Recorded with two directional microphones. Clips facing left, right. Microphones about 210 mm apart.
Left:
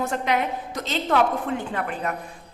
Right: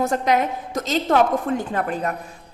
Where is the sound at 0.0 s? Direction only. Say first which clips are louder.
Right 4 dB; 40° right (ahead or behind).